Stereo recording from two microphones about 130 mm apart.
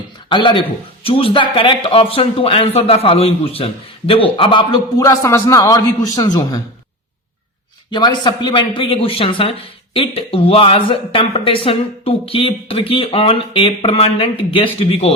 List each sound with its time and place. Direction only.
0.3 s speech: 35° left (ahead or behind)
4.9 s a man's voice: 20° left (ahead or behind)
7.9 s a man's voice: 35° left (ahead or behind)